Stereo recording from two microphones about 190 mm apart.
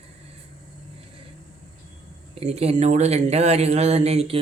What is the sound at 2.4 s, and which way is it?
Speech, 35° right (ahead or behind).